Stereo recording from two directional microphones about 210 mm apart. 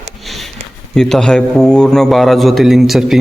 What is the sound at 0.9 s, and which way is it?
A man's voice, centre (ahead or behind).